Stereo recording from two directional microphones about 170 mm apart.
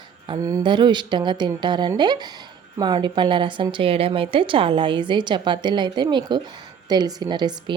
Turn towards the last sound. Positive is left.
turn(degrees=-25)  # may be behind; listen again after turning